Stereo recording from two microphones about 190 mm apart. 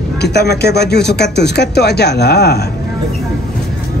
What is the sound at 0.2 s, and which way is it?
Speech, 60° left (ahead or behind).